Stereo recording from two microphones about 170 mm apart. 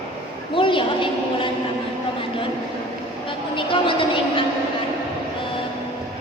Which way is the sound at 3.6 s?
30° left (ahead or behind).